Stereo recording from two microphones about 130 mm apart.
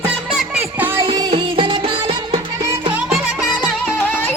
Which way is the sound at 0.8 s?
15° right (ahead or behind).